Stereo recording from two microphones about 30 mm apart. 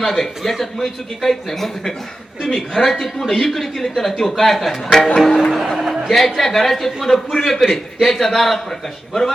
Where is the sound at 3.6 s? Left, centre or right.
Centre.